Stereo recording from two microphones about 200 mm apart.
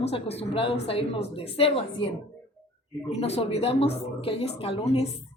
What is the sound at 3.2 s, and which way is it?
A woman's voice, 30° left (ahead or behind).